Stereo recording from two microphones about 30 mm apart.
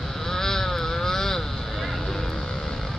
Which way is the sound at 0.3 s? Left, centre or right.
Centre.